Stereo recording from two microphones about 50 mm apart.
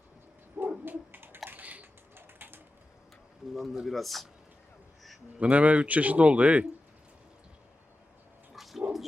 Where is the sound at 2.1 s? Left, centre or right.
Right.